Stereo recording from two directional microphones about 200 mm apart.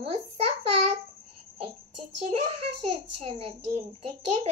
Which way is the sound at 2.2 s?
30° right (ahead or behind).